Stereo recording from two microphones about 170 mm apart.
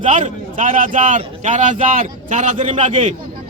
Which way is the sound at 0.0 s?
45° right (ahead or behind).